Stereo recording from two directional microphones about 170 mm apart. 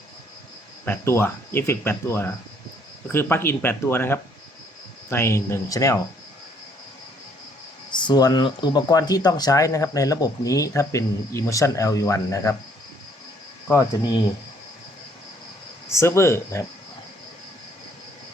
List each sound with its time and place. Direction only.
0.9 s speech: 15° left (ahead or behind)
7.9 s speech: 25° left (ahead or behind)
13.7 s speech: 20° left (ahead or behind)
15.9 s speech: 15° left (ahead or behind)